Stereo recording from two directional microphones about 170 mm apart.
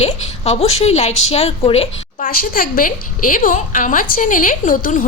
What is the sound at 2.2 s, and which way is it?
A woman's voice, 55° left (ahead or behind).